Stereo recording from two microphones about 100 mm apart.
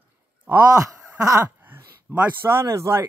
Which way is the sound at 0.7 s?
35° right (ahead or behind).